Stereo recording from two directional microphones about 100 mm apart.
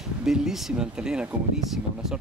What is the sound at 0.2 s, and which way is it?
Speech, 5° right (ahead or behind).